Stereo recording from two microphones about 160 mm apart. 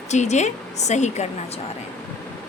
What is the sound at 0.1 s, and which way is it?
A woman's voice, 45° left (ahead or behind).